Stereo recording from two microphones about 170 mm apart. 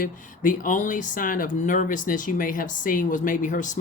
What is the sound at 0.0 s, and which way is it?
Speech, 50° left (ahead or behind).